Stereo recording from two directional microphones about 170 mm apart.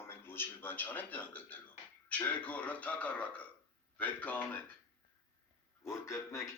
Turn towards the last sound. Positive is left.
turn(degrees=20)  # may be behind; listen again after turning